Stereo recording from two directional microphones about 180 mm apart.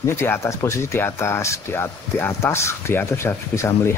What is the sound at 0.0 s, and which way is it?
Speech, 15° left (ahead or behind).